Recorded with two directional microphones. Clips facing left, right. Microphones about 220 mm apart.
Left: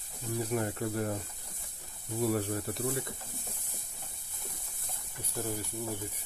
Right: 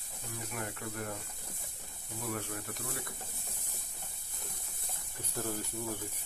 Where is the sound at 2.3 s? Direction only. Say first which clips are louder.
Left 8 dB; 35° left (ahead or behind).